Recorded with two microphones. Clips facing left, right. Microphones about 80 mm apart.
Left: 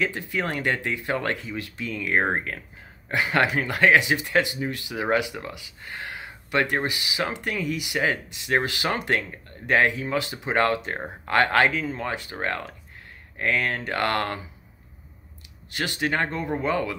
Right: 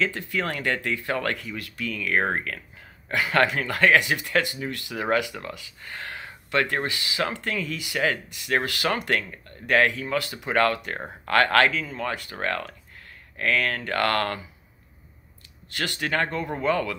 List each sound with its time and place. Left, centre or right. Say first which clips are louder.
0.0 s speech: even; left
15.7 s speech: left 1 dB; left